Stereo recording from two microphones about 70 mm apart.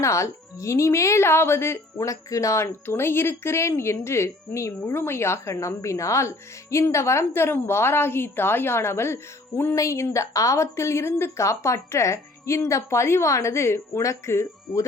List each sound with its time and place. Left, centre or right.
0.0 s a woman's voice: left
2.0 s speech: left
2.8 s a woman's voice: left